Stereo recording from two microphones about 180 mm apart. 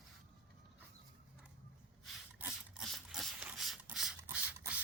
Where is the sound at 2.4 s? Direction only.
5° right (ahead or behind).